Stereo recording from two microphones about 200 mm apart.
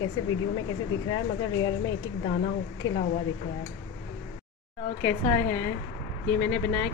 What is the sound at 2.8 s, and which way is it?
Speech, 90° left.